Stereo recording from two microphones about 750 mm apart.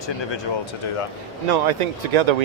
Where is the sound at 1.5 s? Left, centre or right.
Right.